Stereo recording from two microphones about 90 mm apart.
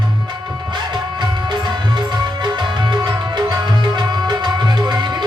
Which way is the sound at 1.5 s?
55° right (ahead or behind).